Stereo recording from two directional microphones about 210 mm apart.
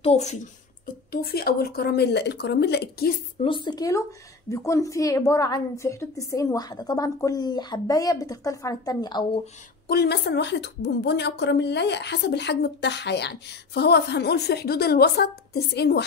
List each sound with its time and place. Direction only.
0.0 s speech: 30° left (ahead or behind)
1.1 s a woman's voice: 45° left (ahead or behind)
3.4 s a woman's voice: 20° left (ahead or behind)
9.8 s a woman's voice: 50° left (ahead or behind)